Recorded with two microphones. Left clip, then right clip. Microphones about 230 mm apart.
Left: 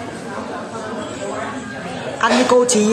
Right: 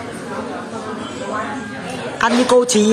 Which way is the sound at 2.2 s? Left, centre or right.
Centre.